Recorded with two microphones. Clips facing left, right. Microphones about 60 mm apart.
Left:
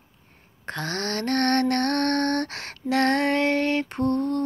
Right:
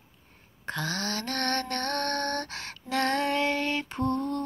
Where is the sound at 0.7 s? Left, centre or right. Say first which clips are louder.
Left 3 dB; left.